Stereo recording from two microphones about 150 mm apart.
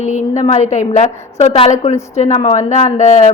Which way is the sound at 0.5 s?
50° left (ahead or behind).